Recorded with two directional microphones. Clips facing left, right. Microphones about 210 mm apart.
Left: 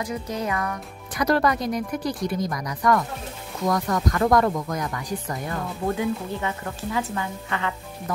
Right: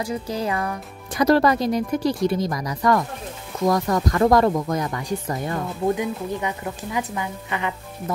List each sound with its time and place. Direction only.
0.0 s a woman's voice: 30° right (ahead or behind)